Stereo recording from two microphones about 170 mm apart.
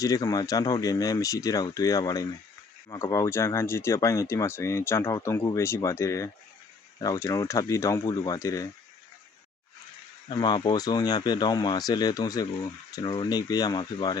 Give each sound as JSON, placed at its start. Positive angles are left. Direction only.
{"t": 0.0, "sound": "speech", "side_deg": 20}
{"t": 10.2, "sound": "speech", "side_deg": 25}